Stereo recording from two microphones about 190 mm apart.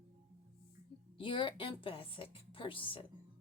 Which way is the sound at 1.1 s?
25° left (ahead or behind).